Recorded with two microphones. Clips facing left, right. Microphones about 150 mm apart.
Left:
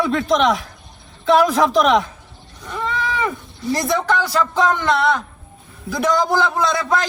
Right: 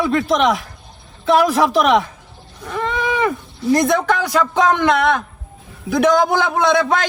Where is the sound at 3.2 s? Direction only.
Centre (ahead or behind).